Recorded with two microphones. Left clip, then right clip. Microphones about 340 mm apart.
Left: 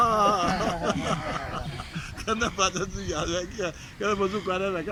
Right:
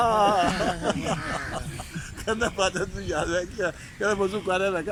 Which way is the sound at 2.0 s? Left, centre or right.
Right.